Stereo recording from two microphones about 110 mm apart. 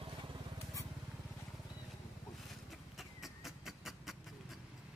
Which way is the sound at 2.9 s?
5° right (ahead or behind).